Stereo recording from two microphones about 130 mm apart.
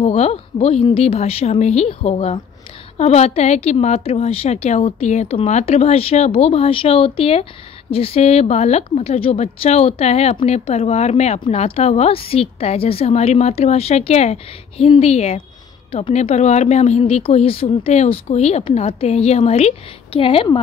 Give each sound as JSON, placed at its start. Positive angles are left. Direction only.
{"t": 0.0, "sound": "a woman's voice", "side_deg": 55}